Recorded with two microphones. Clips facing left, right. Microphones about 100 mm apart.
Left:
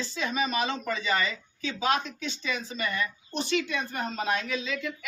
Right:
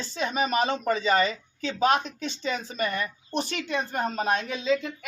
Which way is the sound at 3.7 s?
30° right (ahead or behind).